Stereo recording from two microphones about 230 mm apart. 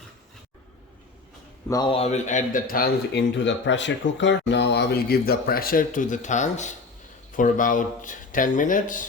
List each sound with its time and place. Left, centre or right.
1.6 s a man's voice: centre; by 9.0 s left